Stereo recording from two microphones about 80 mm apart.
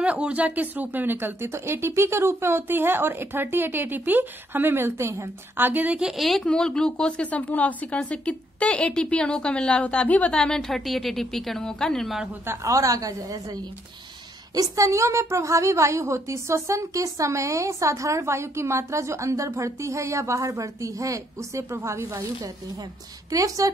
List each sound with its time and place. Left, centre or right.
0.0 s speech: centre; by 5.7 s right
5.7 s speech: right
5.9 s a woman's voice: centre
12.4 s a woman's voice: right